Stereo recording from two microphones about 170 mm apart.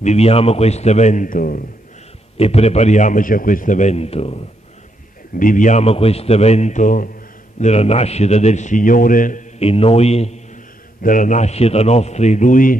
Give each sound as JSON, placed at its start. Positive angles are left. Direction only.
{"t": 0.0, "sound": "a man's voice", "side_deg": 40}
{"t": 2.3, "sound": "a man's voice", "side_deg": 35}
{"t": 5.3, "sound": "a man's voice", "side_deg": 50}
{"t": 9.6, "sound": "a man's voice", "side_deg": 35}
{"t": 11.0, "sound": "a man's voice", "side_deg": 50}